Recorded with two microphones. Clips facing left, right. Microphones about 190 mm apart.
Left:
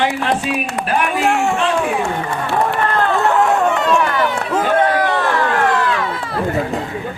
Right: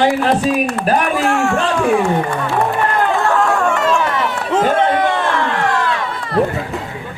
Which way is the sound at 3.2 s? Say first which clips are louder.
Left 1 dB; 20° left (ahead or behind).